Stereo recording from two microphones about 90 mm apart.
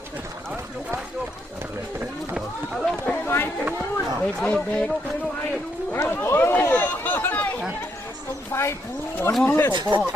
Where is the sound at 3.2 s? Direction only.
25° left (ahead or behind).